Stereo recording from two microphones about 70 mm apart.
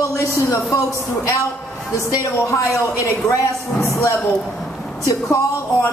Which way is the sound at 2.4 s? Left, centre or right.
Left.